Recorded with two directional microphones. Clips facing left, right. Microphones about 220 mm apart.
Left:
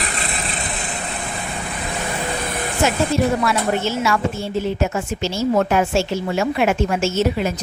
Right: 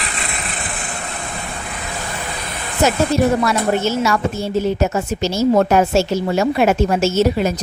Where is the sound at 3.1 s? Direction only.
40° right (ahead or behind).